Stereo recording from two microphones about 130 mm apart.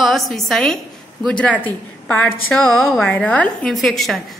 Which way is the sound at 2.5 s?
5° left (ahead or behind).